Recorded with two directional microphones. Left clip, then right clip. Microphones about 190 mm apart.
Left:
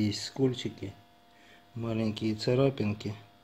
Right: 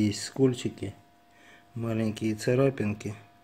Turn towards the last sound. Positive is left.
turn(degrees=-5)  # may be behind; listen again after turning